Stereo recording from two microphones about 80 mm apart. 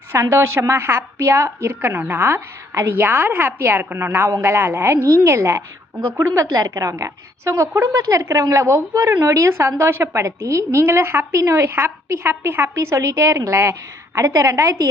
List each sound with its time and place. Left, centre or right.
0.1 s a woman's voice: right